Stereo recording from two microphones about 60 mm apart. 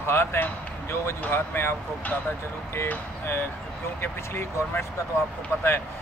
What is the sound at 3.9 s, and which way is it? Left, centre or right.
Speech, left.